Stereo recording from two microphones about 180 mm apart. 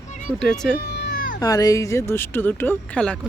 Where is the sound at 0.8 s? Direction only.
70° left (ahead or behind); by 1.4 s 50° left (ahead or behind).